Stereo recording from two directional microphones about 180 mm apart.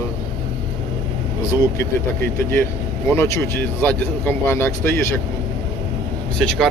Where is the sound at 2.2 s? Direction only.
15° left (ahead or behind).